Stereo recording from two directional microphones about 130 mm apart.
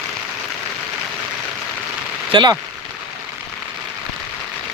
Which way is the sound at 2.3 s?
35° right (ahead or behind).